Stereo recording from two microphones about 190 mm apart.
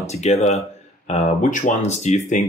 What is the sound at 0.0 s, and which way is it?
Speech, 35° left (ahead or behind).